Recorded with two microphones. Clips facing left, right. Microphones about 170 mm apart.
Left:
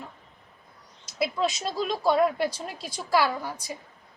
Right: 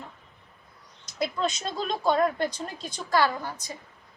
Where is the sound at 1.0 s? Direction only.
5° left (ahead or behind).